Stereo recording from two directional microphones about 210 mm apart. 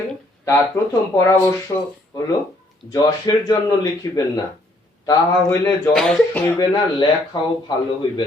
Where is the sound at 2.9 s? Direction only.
15° left (ahead or behind).